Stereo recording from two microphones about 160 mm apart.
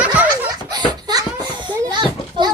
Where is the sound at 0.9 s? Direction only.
25° right (ahead or behind).